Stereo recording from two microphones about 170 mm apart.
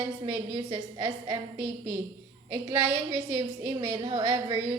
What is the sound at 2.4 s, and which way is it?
Speech, 15° right (ahead or behind).